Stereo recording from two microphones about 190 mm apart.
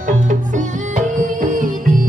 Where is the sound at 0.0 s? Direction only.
40° right (ahead or behind).